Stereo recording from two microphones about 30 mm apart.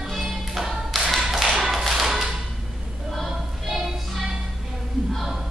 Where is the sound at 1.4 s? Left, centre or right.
Centre.